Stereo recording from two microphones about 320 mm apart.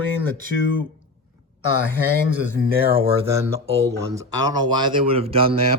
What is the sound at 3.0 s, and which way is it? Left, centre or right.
Speech, centre.